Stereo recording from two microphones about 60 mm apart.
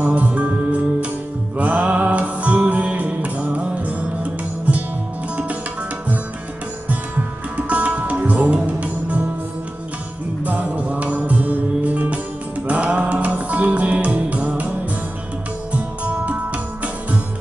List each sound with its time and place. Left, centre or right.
0.0 s music: right
7.5 s music: right
10.4 s music: right
15.7 s music: right